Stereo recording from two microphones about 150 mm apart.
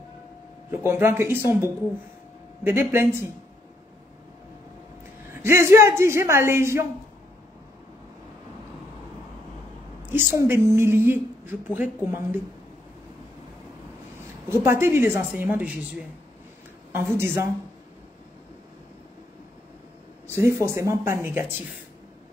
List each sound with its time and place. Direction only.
0.7 s speech: 15° right (ahead or behind)
2.6 s speech: 15° right (ahead or behind)
5.3 s speech: 15° right (ahead or behind)
10.1 s speech: 15° right (ahead or behind)
14.5 s speech: 15° right (ahead or behind)
20.3 s speech: 20° right (ahead or behind)